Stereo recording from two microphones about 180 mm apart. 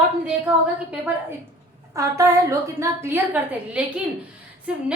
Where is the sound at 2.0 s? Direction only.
15° right (ahead or behind).